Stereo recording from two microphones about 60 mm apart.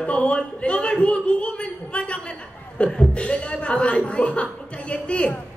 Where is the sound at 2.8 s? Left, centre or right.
Left.